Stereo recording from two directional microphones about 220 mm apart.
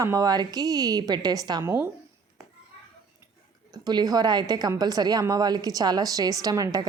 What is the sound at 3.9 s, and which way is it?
A woman's voice, 20° right (ahead or behind).